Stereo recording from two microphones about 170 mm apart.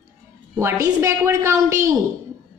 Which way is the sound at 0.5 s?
15° right (ahead or behind).